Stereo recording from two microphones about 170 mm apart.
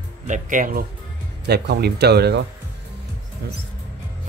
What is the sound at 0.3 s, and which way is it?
Speech, 50° right (ahead or behind).